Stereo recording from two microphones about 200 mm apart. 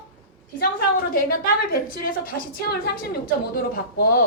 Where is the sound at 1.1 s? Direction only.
50° left (ahead or behind).